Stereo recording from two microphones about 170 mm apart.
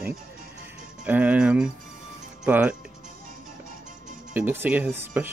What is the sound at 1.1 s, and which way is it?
Speech, 10° right (ahead or behind).